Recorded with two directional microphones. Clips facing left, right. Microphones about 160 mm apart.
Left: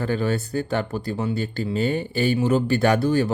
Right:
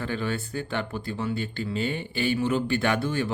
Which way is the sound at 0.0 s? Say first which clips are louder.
Left 6 dB; 40° left (ahead or behind).